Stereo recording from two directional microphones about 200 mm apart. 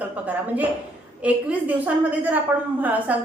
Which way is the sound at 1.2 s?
5° right (ahead or behind).